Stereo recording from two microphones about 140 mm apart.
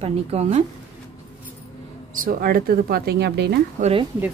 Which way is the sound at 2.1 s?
85° right.